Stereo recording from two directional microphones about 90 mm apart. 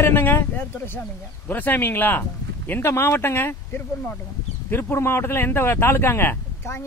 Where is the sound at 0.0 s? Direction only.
20° left (ahead or behind).